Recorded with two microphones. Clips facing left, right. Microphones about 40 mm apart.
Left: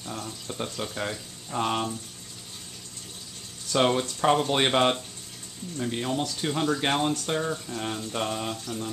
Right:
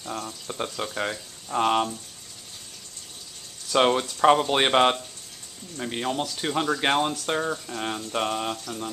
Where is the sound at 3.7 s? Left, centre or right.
Centre.